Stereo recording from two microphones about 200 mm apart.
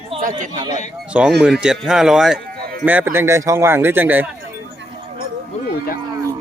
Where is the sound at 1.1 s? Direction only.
5° right (ahead or behind).